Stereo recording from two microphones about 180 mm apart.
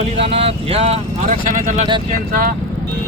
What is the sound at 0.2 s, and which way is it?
Speech, 35° right (ahead or behind).